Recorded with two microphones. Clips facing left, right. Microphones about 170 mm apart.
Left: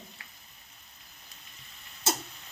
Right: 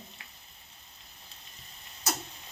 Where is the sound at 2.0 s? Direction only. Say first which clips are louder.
Left 3 dB; 25° left (ahead or behind).